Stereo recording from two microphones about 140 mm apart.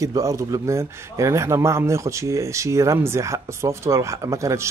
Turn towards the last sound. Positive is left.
turn(degrees=-20)  # may be behind; listen again after turning